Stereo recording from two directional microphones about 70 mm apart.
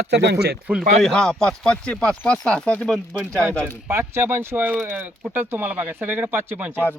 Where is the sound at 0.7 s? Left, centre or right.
Right.